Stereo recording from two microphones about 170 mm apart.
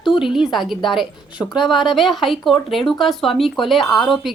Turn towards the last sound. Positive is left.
turn(degrees=0)  # may be behind; listen again after turning